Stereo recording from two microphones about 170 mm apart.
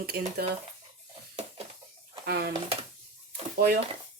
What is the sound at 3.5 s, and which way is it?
Speech, 70° right (ahead or behind).